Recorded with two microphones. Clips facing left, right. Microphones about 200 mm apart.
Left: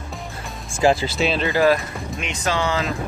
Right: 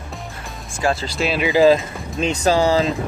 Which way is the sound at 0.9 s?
5° left (ahead or behind).